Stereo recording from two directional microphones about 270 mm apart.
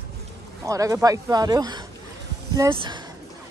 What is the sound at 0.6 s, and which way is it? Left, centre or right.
Speech, centre.